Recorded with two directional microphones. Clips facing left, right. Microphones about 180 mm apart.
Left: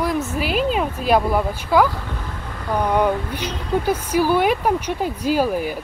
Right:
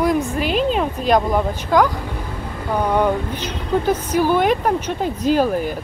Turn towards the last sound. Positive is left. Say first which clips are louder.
# right 2 dB
turn(degrees=10)  # may be behind; listen again after turning